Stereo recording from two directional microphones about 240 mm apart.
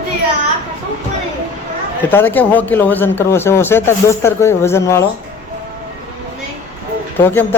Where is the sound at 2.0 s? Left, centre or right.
Centre.